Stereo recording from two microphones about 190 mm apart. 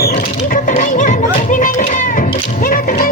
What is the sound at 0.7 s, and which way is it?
Music, 40° left (ahead or behind).